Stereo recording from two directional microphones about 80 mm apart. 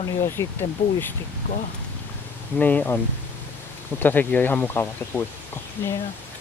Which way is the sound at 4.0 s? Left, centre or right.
Left.